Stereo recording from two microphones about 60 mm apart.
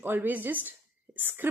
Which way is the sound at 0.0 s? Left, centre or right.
Right.